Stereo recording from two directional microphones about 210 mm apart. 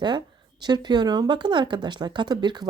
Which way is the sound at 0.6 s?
20° right (ahead or behind).